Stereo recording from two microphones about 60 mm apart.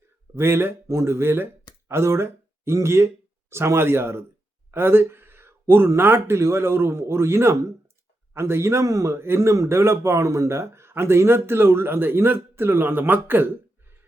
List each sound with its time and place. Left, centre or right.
0.3 s speech: right
4.7 s a sound: right
6.0 s speech: right
9.1 s speech: right